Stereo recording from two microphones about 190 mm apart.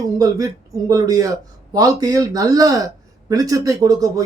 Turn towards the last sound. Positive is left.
turn(degrees=-15)  # may be behind; listen again after turning